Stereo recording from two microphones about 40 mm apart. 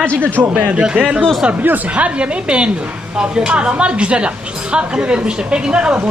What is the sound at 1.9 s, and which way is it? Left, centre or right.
Speech, right.